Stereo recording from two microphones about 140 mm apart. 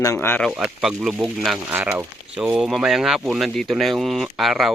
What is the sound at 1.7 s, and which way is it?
Speech, 15° right (ahead or behind).